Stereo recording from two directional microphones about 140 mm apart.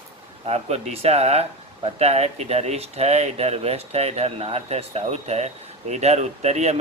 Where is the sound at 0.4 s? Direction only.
50° right (ahead or behind).